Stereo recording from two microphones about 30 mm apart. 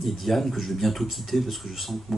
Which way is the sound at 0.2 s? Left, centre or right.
Centre.